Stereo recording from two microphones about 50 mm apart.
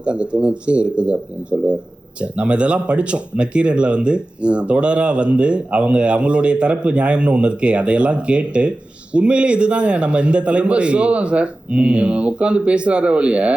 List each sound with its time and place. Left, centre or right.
0.0 s speech: right